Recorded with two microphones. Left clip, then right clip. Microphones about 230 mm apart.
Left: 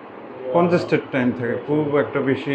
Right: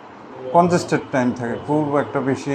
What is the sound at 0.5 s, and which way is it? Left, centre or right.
A man's voice, right.